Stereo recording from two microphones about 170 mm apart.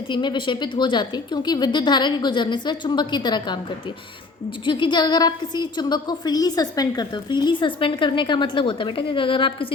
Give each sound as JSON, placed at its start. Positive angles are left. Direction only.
{"t": 0.1, "sound": "a woman's voice", "side_deg": 25}
{"t": 4.6, "sound": "a woman's voice", "side_deg": 30}